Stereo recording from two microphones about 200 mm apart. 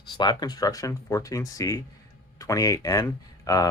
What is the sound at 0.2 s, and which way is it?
Speech, 20° left (ahead or behind).